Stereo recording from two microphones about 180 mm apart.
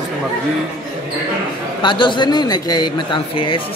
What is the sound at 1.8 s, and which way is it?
A man's voice, 25° left (ahead or behind).